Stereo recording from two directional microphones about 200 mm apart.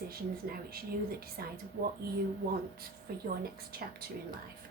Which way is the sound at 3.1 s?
50° right (ahead or behind).